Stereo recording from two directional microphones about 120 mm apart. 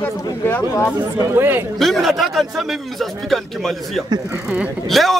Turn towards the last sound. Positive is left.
turn(degrees=0)  # may be behind; listen again after turning